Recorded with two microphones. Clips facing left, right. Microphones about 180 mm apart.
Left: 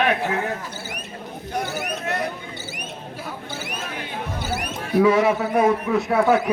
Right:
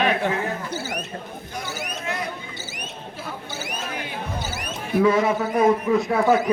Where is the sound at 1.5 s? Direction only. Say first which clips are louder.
Left 6 dB; 55° left (ahead or behind).